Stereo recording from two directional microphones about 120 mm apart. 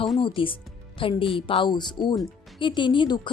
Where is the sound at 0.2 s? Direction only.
45° left (ahead or behind).